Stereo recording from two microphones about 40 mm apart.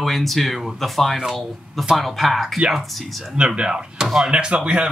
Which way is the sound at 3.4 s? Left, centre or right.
Right.